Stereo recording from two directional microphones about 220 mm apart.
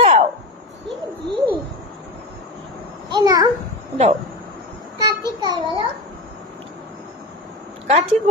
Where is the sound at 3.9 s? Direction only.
30° right (ahead or behind).